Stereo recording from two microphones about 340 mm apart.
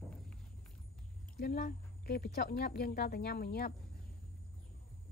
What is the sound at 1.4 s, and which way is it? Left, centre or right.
A woman's voice, left.